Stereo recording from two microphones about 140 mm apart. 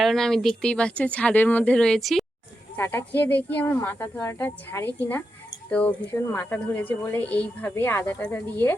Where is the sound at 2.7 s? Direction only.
20° left (ahead or behind).